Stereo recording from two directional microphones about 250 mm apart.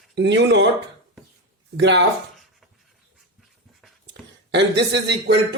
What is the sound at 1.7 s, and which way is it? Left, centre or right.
Speech, right.